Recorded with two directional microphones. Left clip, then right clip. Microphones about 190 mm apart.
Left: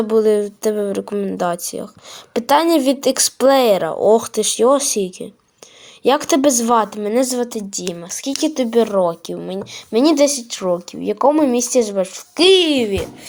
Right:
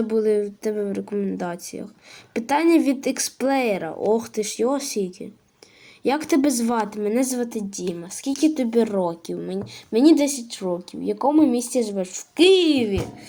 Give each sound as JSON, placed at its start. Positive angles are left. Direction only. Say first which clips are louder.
{"t": 0.1, "sound": "a woman's voice", "louder": "left 6 dB", "side_deg": 10}